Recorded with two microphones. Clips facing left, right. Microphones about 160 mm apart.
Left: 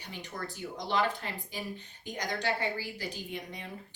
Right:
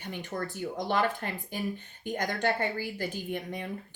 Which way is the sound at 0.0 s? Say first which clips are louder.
Right 5 dB; 50° right (ahead or behind).